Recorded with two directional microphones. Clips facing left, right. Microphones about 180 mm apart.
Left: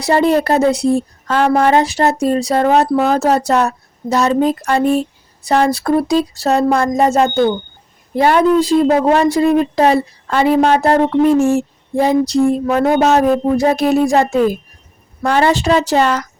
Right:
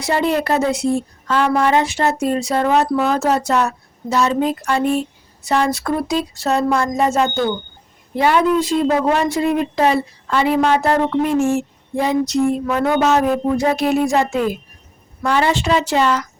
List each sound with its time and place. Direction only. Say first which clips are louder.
0.0 s speech: left 5 dB; 40° left (ahead or behind)